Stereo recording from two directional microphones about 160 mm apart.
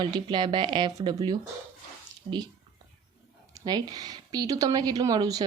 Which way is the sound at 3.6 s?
25° right (ahead or behind).